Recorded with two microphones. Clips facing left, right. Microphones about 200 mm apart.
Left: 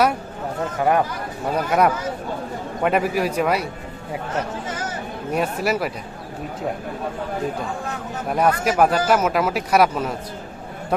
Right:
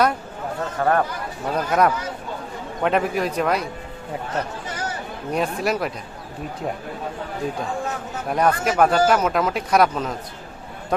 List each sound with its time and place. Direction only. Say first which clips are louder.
0.8 s a man's voice: left 1 dB; 15° left (ahead or behind)
5.3 s speech: left 1 dB; 5° left (ahead or behind)
8.3 s speech: left 1 dB; 5° left (ahead or behind)